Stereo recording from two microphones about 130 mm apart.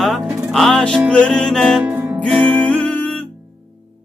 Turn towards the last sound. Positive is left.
turn(degrees=10)  # may be behind; listen again after turning